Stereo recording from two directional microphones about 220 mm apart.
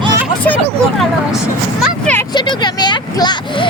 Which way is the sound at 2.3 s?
20° left (ahead or behind).